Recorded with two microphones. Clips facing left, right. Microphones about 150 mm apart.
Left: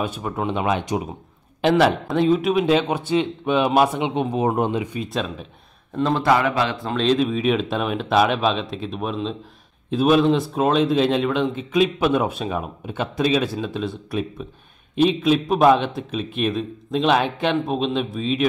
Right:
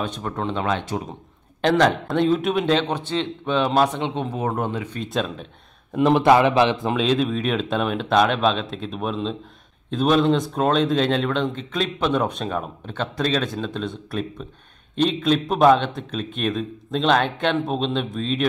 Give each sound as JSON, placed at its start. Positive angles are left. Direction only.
{"t": 0.0, "sound": "speech", "side_deg": 10}
{"t": 5.9, "sound": "a man's voice", "side_deg": -15}
{"t": 7.0, "sound": "a man's voice", "side_deg": 0}